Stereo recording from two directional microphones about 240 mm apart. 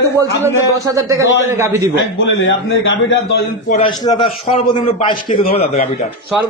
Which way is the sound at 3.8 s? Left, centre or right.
Centre.